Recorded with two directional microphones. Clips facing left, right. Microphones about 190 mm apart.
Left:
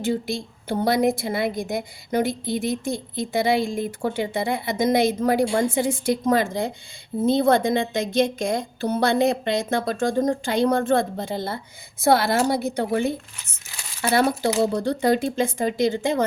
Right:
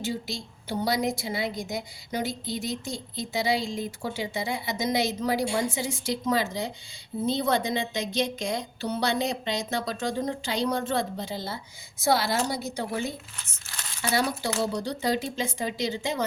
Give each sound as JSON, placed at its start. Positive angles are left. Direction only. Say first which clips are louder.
{"t": 0.0, "sound": "a woman's voice", "louder": "left 7 dB", "side_deg": 55}